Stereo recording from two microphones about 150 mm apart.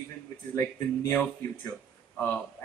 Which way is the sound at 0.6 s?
15° left (ahead or behind).